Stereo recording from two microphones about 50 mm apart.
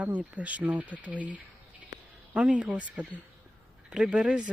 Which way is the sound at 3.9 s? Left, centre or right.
Centre.